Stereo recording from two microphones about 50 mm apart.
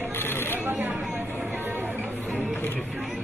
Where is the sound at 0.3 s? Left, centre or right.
Left.